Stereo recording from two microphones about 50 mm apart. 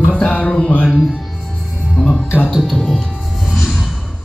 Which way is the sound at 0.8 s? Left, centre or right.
Centre.